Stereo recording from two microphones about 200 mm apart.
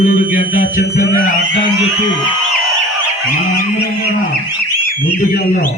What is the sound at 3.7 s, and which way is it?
Livestock, 50° left (ahead or behind).